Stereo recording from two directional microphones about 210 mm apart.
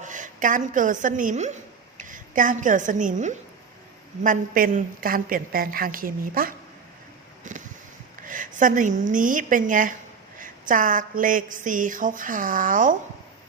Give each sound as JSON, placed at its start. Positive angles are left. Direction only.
{"t": 0.0, "sound": "a woman's voice", "side_deg": -35}
{"t": 7.5, "sound": "a sound", "side_deg": -35}
{"t": 8.2, "sound": "a woman's voice", "side_deg": -40}